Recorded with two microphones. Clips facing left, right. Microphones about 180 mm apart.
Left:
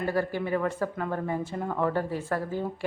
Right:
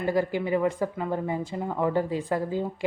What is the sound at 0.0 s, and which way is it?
Speech, 15° right (ahead or behind).